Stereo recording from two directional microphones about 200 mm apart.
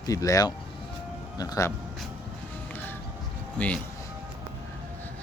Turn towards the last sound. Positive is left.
turn(degrees=5)  # may be behind; listen again after turning